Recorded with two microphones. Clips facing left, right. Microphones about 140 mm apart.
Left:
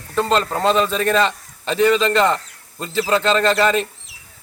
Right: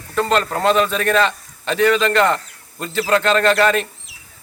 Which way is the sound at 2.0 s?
Centre (ahead or behind).